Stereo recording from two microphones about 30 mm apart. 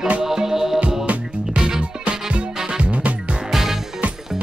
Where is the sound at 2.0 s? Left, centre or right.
Right.